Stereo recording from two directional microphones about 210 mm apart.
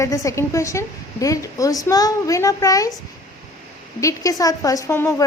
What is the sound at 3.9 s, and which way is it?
A woman's voice, 15° left (ahead or behind).